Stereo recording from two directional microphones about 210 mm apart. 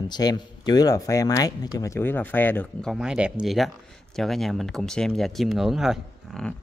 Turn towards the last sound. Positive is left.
turn(degrees=0)  # may be behind; listen again after turning